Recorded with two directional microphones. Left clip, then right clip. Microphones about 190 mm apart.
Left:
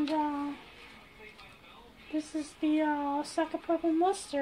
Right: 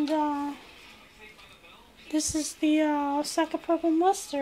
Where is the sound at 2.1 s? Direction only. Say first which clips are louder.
Right 7 dB; 50° right (ahead or behind).